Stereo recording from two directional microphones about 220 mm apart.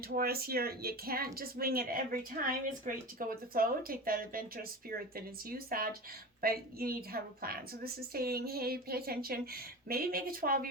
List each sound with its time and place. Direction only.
0.2 s speech: 45° right (ahead or behind)